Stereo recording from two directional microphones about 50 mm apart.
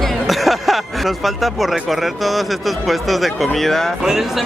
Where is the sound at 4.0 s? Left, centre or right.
Centre.